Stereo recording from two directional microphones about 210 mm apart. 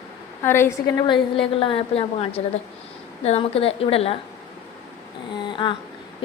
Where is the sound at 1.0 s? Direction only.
25° left (ahead or behind).